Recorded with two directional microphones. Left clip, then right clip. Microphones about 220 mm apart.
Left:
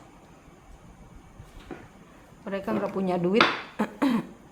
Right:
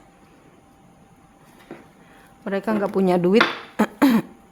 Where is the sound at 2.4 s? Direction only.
45° right (ahead or behind).